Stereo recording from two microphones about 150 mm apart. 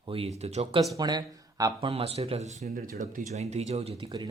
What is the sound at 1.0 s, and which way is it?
Speech, 25° right (ahead or behind).